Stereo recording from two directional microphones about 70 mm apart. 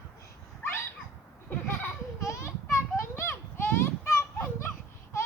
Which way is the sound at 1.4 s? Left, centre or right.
Left.